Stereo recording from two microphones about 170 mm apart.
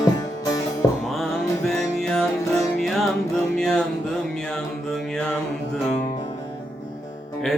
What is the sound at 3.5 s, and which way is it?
Music, 5° left (ahead or behind).